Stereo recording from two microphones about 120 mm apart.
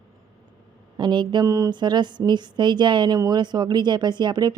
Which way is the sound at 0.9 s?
40° right (ahead or behind).